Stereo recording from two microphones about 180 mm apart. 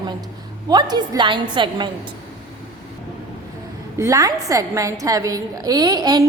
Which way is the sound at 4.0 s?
20° right (ahead or behind).